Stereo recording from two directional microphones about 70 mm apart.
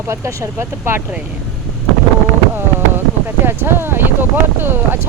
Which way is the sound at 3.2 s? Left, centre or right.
Right.